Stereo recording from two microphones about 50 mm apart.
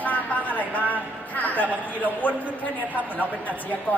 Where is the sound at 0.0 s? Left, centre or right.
Left.